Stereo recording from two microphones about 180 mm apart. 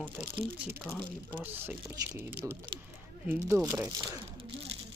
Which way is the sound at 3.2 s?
15° right (ahead or behind).